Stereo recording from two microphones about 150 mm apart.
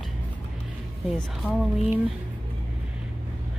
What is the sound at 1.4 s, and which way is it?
Speech, 15° left (ahead or behind).